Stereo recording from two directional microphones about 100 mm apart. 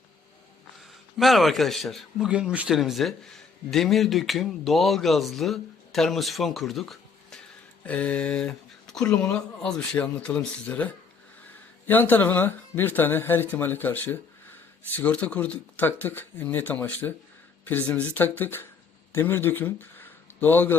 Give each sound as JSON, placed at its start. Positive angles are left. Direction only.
{"t": 1.2, "sound": "a man's voice", "side_deg": 0}